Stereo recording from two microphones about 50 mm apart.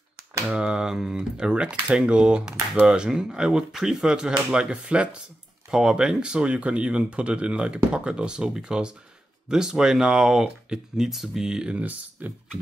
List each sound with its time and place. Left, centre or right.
0.5 s speech: centre
5.7 s speech: centre
11.8 s speech: right